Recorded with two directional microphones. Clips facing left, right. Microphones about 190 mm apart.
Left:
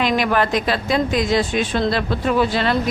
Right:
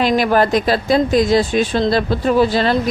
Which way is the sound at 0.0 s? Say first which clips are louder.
Right 4 dB; 35° right (ahead or behind).